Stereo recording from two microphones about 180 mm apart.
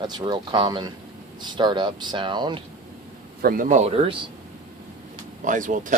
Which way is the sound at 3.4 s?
50° right (ahead or behind).